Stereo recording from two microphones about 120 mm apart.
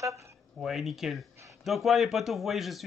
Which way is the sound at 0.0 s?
25° right (ahead or behind).